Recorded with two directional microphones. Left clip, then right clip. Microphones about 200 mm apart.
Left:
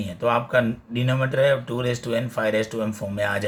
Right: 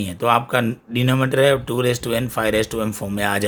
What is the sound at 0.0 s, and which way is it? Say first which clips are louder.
Speech: right 4 dB; 55° right (ahead or behind).